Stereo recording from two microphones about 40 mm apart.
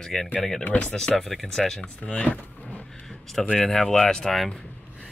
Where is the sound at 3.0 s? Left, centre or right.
Centre.